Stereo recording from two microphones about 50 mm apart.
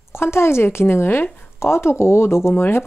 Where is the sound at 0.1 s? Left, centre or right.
Left.